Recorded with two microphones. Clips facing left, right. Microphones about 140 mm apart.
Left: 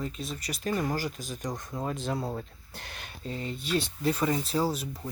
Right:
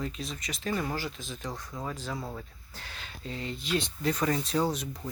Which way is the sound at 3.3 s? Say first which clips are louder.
Left 2 dB; 40° left (ahead or behind).